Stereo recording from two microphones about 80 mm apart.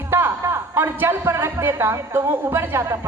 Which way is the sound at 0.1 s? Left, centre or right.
Right.